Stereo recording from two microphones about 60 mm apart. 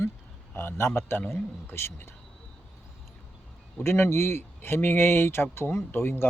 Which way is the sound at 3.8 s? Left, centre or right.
Left.